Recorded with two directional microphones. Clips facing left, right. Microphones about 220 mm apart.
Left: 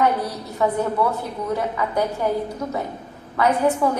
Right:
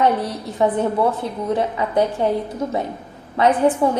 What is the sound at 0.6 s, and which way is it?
A woman's voice, 25° right (ahead or behind).